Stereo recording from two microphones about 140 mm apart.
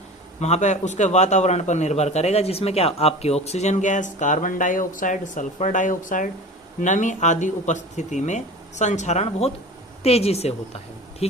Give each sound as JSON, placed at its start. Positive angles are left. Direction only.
{"t": 0.3, "sound": "a man's voice", "side_deg": 55}